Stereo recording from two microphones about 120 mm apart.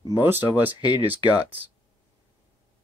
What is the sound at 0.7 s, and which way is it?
Speech, 40° left (ahead or behind).